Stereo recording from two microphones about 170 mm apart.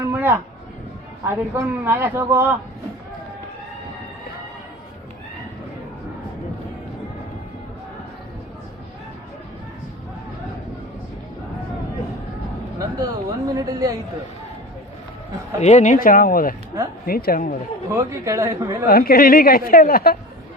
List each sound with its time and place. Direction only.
0.0 s a sound: 10° right (ahead or behind)
1.5 s a man's voice: 15° right (ahead or behind)
13.0 s speech: 20° right (ahead or behind)
15.6 s a woman's voice: 45° left (ahead or behind)
17.9 s a man's voice: 20° right (ahead or behind)
18.9 s a woman's voice: 60° left (ahead or behind)